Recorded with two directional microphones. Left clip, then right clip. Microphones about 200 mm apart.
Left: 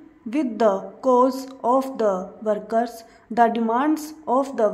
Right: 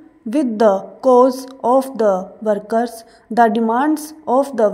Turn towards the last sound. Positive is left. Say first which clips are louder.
# right 5 dB
turn(degrees=-20)  # may be behind; listen again after turning